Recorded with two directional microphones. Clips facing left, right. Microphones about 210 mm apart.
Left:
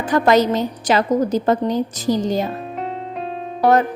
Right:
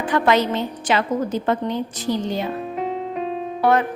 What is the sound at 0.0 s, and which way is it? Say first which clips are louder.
A woman's voice: left 3 dB; 40° left (ahead or behind).